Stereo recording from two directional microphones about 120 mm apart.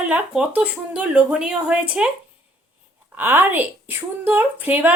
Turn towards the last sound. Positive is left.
turn(degrees=-15)  # may be behind; listen again after turning